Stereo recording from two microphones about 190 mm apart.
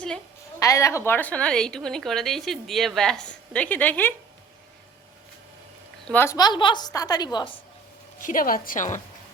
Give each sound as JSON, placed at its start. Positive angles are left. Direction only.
{"t": 0.6, "sound": "a woman's voice", "side_deg": 15}
{"t": 6.1, "sound": "a woman's voice", "side_deg": 10}
{"t": 8.2, "sound": "a woman's voice", "side_deg": 45}